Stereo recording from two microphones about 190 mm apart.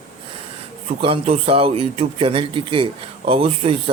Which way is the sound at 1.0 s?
30° right (ahead or behind).